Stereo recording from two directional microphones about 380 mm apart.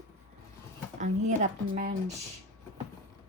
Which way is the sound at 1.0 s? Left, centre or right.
Centre.